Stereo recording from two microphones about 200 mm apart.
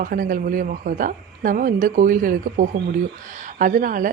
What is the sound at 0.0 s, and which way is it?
Speech, 45° right (ahead or behind).